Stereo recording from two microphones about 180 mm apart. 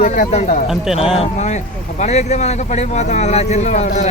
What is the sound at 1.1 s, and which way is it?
Speech, 40° left (ahead or behind).